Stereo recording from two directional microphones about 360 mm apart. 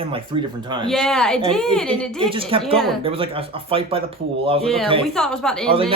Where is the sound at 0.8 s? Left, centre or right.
Centre.